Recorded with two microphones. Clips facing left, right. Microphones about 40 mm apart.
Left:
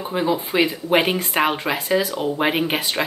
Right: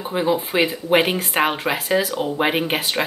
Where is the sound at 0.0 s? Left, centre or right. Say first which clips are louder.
Right 1 dB; centre.